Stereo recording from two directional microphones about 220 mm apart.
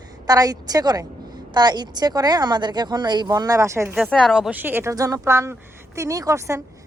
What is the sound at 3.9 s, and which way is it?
Speech, centre (ahead or behind).